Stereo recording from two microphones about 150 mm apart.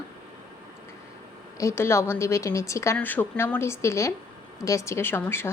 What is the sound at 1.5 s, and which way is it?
A woman's voice, 20° left (ahead or behind).